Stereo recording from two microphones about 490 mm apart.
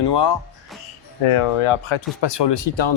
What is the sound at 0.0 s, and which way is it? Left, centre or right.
Speech, left.